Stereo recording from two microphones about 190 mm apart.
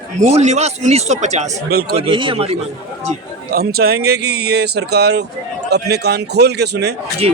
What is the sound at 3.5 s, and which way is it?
A man's voice, 55° right (ahead or behind).